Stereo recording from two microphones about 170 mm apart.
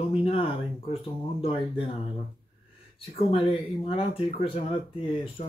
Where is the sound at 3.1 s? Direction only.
30° left (ahead or behind).